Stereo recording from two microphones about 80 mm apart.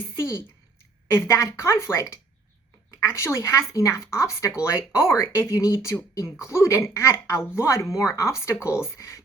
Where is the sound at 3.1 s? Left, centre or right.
Left.